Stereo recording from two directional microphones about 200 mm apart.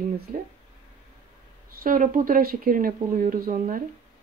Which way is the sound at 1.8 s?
45° right (ahead or behind).